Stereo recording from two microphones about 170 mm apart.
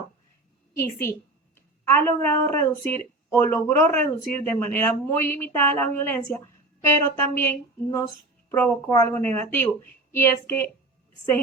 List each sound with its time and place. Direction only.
0.7 s a woman's voice: 15° left (ahead or behind)
8.4 s speech: 15° left (ahead or behind)